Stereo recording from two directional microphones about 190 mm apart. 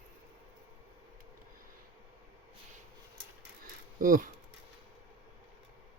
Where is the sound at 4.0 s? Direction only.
45° right (ahead or behind).